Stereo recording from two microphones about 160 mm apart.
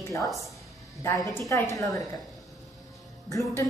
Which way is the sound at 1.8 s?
20° left (ahead or behind).